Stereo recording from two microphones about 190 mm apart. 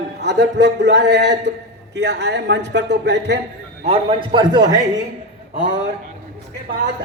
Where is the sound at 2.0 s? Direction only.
65° right (ahead or behind).